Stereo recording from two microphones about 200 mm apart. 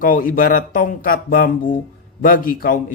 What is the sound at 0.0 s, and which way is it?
Speech, 45° left (ahead or behind).